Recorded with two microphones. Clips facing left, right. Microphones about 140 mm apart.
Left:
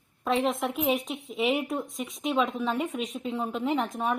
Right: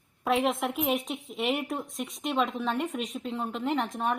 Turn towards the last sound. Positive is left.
turn(degrees=0)  # may be behind; listen again after turning